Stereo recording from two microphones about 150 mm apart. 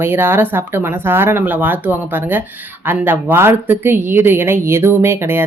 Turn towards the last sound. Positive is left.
turn(degrees=-15)  # may be behind; listen again after turning